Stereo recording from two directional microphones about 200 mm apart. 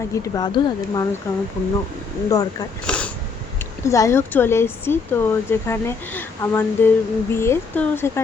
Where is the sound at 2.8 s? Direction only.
5° left (ahead or behind).